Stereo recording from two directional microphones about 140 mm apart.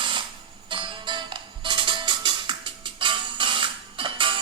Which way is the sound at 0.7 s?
35° right (ahead or behind).